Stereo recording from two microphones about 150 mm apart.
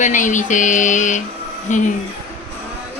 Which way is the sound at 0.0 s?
55° left (ahead or behind).